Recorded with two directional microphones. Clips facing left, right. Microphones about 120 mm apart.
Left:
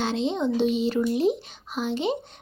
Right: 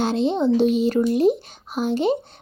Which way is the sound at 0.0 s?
45° right (ahead or behind).